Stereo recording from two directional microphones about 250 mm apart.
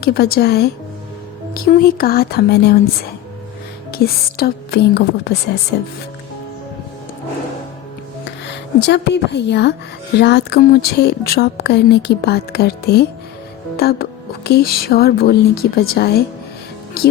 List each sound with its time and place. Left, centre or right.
0.0 s speech: left
3.9 s speech: left
8.4 s speech: left